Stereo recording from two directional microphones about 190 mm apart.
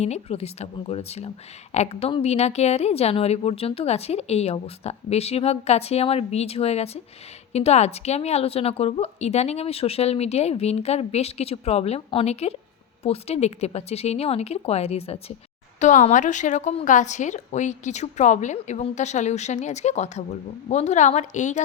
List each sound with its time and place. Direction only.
0.0 s a woman's voice: 35° left (ahead or behind)